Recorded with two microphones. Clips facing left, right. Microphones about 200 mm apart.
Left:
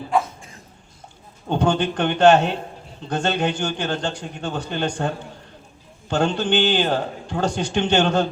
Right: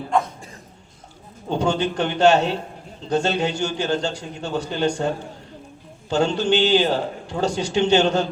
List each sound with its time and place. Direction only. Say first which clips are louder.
0.1 s a sound: even; 5° left (ahead or behind)
1.5 s a man's voice: left 1 dB; 55° left (ahead or behind)
6.1 s a man's voice: right 1 dB; 50° left (ahead or behind)